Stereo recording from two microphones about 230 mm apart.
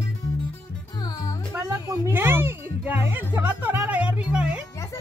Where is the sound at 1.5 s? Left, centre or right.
Centre.